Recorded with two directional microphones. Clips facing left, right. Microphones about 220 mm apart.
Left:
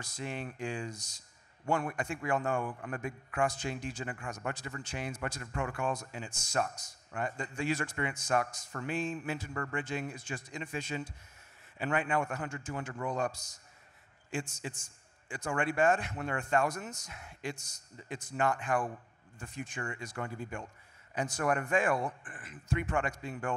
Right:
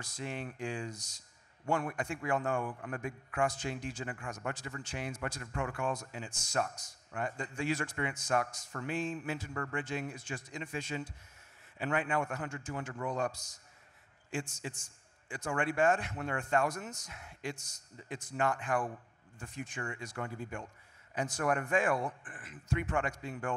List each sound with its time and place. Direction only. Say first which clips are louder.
0.0 s speech: left 1 dB; 10° left (ahead or behind)
6.3 s a man's voice: left 1 dB; 5° left (ahead or behind)
7.1 s speech: left 1 dB; 15° left (ahead or behind)
14.3 s a man's voice: left 1 dB; 10° left (ahead or behind)